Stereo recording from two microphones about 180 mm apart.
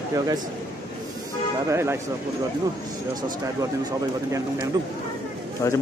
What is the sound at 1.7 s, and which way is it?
Speech, 15° right (ahead or behind).